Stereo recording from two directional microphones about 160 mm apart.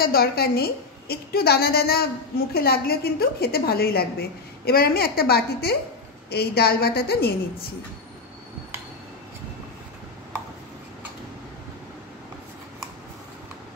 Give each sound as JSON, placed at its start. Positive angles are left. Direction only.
{"t": 0.0, "sound": "a woman's voice", "side_deg": 70}